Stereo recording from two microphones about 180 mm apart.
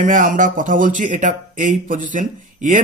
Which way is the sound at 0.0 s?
45° right (ahead or behind).